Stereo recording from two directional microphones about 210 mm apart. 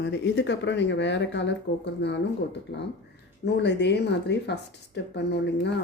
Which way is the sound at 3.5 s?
55° left (ahead or behind).